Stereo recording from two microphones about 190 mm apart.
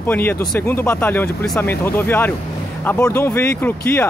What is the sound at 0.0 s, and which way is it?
Speech, 10° left (ahead or behind).